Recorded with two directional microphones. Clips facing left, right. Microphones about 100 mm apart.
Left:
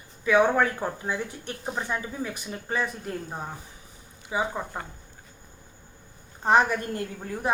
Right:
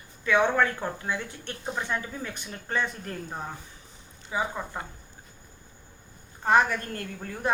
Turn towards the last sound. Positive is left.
turn(degrees=15)  # may be behind; listen again after turning